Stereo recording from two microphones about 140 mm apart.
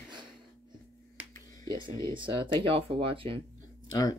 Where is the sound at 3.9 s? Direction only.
25° left (ahead or behind).